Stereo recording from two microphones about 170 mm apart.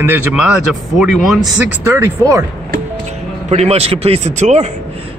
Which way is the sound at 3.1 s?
40° right (ahead or behind).